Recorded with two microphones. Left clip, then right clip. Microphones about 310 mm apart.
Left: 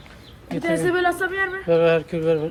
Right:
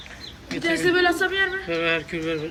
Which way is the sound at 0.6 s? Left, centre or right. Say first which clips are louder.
Even; centre.